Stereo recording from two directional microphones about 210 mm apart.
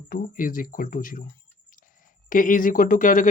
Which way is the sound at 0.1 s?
40° left (ahead or behind).